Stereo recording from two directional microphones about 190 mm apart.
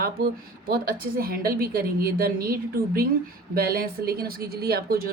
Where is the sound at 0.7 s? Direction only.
50° right (ahead or behind).